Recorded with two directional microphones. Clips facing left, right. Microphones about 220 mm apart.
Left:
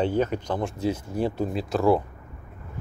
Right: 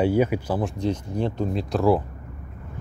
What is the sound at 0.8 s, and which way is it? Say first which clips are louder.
Speech: even; 5° left (ahead or behind).